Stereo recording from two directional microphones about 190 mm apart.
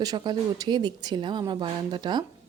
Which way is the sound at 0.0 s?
20° right (ahead or behind).